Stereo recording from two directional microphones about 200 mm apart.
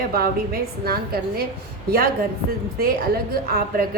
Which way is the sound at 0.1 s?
50° right (ahead or behind).